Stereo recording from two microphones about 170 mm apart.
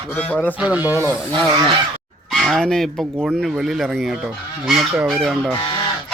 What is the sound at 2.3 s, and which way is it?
Speech, centre (ahead or behind).